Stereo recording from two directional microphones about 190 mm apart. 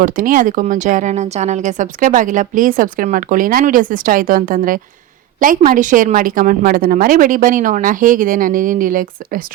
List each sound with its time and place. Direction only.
0.0 s speech: 45° right (ahead or behind)